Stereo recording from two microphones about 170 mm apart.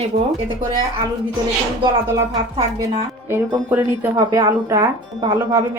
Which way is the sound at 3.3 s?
10° right (ahead or behind).